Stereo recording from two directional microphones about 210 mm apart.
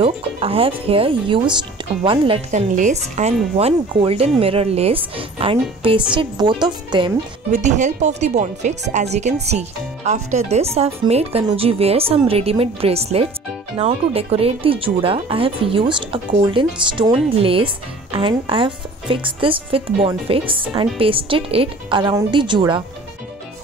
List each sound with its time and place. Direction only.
0.0 s speech: 25° right (ahead or behind)
2.7 s speech: 35° right (ahead or behind)
7.5 s speech: 35° right (ahead or behind)